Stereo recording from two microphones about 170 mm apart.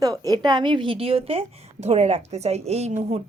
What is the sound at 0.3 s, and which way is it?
A woman's voice, 25° right (ahead or behind).